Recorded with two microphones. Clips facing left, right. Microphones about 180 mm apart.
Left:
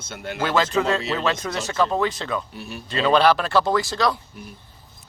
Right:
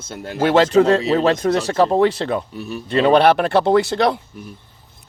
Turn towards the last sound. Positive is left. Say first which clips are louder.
# right 6 dB
turn(degrees=-60)  # may be behind; listen again after turning